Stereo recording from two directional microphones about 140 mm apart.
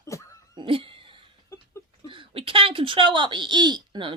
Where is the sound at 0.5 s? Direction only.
40° right (ahead or behind).